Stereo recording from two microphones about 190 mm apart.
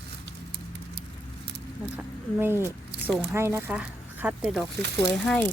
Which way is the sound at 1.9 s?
10° right (ahead or behind).